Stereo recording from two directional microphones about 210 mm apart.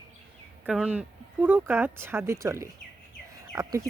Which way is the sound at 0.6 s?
5° right (ahead or behind).